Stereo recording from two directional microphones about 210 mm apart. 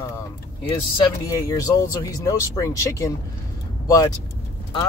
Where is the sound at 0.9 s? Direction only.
15° left (ahead or behind).